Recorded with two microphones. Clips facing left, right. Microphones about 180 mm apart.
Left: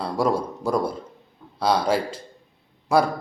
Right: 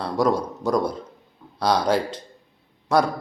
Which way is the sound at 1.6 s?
5° left (ahead or behind).